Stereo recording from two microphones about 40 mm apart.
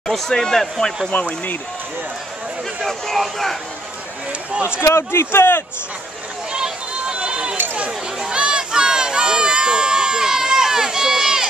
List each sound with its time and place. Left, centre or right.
0.0 s a sound: centre
0.4 s speech: centre
1.1 s speech: left
2.9 s speech: centre
4.3 s speech: right
5.1 s speech: left
6.5 s run: right
8.3 s a sound: right